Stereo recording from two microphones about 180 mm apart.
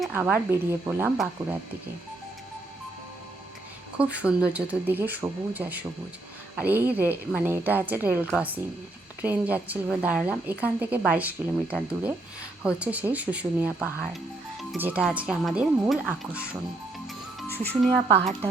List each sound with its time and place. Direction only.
0.1 s speech: 10° right (ahead or behind)
3.9 s speech: 5° right (ahead or behind)
17.5 s speech: 10° left (ahead or behind)